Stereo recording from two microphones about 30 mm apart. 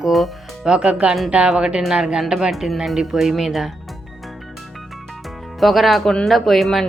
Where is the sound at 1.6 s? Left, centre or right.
Right.